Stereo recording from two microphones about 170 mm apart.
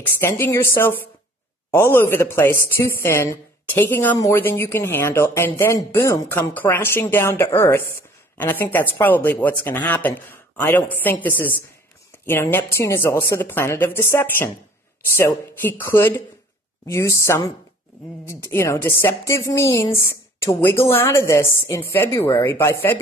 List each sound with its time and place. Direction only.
0.0 s speech: 15° left (ahead or behind)